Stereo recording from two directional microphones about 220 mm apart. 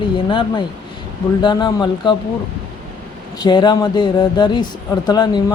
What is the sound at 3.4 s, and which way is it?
Speech, 20° left (ahead or behind).